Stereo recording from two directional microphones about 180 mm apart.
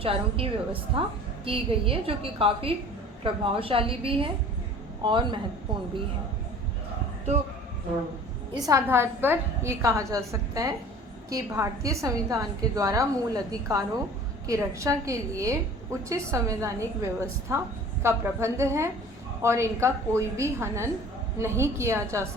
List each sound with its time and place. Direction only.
0.0 s a woman's voice: 30° right (ahead or behind)
8.5 s a woman's voice: 20° right (ahead or behind)